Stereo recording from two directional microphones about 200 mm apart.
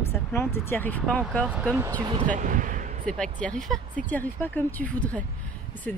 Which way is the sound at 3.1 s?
5° left (ahead or behind).